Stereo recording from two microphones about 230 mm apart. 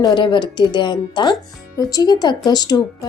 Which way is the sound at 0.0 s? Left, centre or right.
Centre.